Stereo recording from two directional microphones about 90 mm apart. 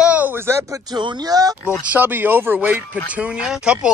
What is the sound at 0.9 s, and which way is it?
Speech, 55° right (ahead or behind).